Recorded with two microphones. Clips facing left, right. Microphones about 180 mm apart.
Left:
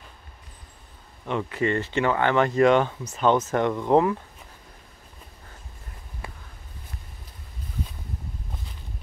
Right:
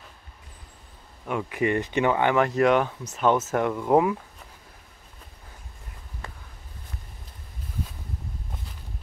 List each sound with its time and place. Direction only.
1.2 s speech: 10° right (ahead or behind)
2.3 s speech: 5° right (ahead or behind)
6.2 s walk: 10° left (ahead or behind)